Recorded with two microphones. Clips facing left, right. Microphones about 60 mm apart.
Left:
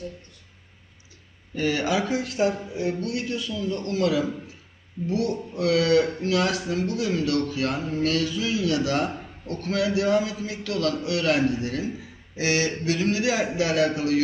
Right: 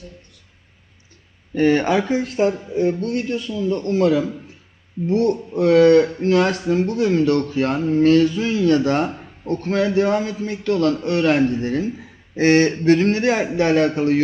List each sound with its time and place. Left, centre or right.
1.5 s a man's voice: right